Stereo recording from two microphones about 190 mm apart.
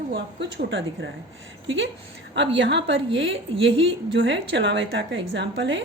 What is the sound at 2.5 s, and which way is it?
A woman's voice, 70° right (ahead or behind).